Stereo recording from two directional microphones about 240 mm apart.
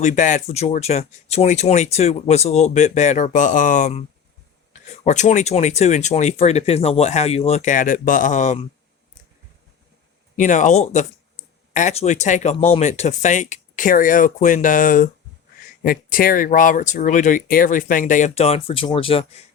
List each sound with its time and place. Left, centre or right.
0.0 s speech: left
10.3 s speech: left